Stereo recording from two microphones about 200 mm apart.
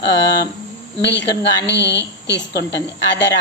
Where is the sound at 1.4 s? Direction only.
60° left (ahead or behind).